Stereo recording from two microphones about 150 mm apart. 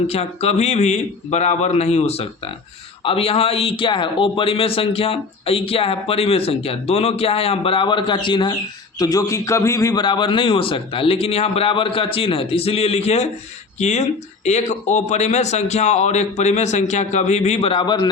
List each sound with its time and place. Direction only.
0.1 s a man's voice: 45° left (ahead or behind)